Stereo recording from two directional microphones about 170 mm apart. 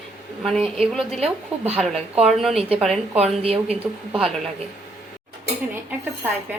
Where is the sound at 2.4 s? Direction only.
Centre (ahead or behind).